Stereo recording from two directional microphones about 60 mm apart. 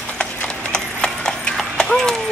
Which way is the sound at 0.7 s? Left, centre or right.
Centre.